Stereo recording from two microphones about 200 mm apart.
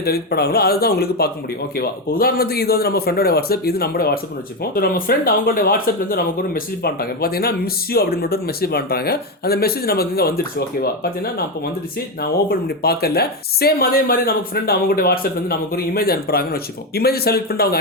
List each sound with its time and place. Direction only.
0.0 s speech: 50° left (ahead or behind)
12.2 s speech: 50° left (ahead or behind)